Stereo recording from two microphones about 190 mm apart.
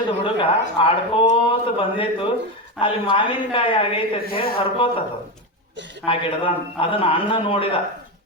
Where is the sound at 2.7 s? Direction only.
25° left (ahead or behind).